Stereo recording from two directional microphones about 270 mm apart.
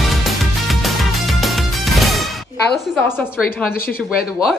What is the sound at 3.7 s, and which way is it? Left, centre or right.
Speech, left.